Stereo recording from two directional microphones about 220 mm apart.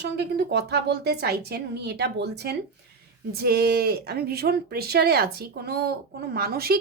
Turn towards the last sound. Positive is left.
turn(degrees=-45)  # may be behind; listen again after turning